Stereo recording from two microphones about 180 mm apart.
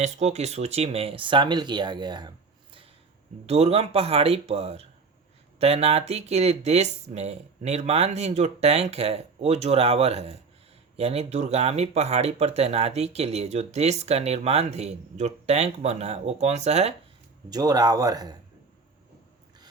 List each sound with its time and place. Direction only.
0.0 s speech: 40° right (ahead or behind)
3.4 s speech: 35° right (ahead or behind)
17.5 s speech: 20° right (ahead or behind)